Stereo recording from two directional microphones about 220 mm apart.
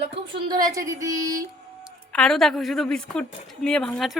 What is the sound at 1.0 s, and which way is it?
Speech, 15° right (ahead or behind).